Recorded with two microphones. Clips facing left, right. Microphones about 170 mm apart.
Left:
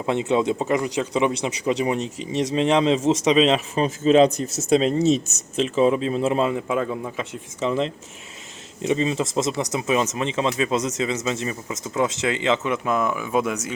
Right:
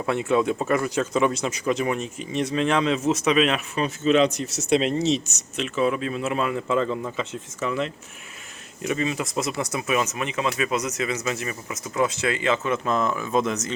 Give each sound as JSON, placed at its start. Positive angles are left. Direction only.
{"t": 0.0, "sound": "speech", "side_deg": 20}
{"t": 3.0, "sound": "speech", "side_deg": 90}
{"t": 3.2, "sound": "speech", "side_deg": 25}
{"t": 4.9, "sound": "speech", "side_deg": 50}
{"t": 5.5, "sound": "speech", "side_deg": 30}
{"t": 6.5, "sound": "speech", "side_deg": 15}
{"t": 7.6, "sound": "speech", "side_deg": 30}